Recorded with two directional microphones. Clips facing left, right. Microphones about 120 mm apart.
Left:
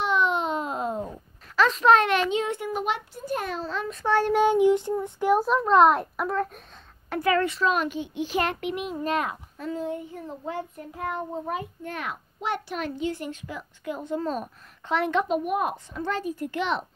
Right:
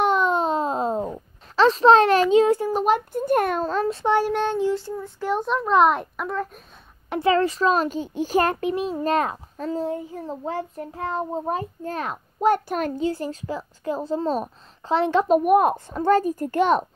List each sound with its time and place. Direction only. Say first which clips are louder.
0.0 s a sound: right 4 dB; 45° right (ahead or behind)
2.3 s a child's voice: right 9 dB; 35° right (ahead or behind); by 3.8 s 50° right (ahead or behind)
4.0 s child singing: right 1 dB; 15° right (ahead or behind)
4.3 s child singing: left 3 dB; 10° left (ahead or behind)
5.3 s a child's voice: left 1 dB; 5° left (ahead or behind)
7.1 s a child's voice: right 4 dB; 25° right (ahead or behind)
15.2 s a child's voice: right 9 dB; 50° right (ahead or behind)